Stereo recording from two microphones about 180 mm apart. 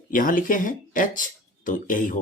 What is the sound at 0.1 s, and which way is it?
Speech, 50° left (ahead or behind).